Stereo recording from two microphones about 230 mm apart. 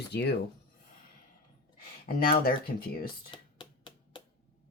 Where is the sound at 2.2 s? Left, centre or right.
Left.